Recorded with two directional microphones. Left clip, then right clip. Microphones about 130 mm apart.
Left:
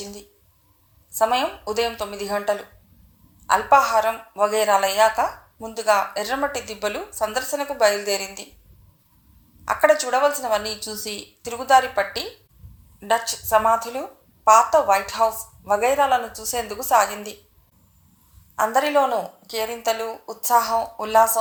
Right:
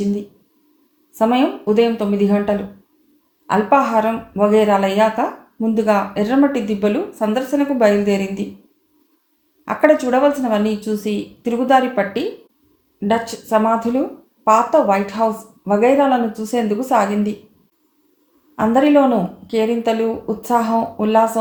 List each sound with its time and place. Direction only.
1.1 s a woman's voice: 35° left (ahead or behind)
9.6 s a woman's voice: 35° left (ahead or behind)
18.5 s a woman's voice: 40° left (ahead or behind)